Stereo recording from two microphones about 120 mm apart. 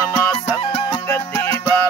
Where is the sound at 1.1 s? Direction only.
20° left (ahead or behind).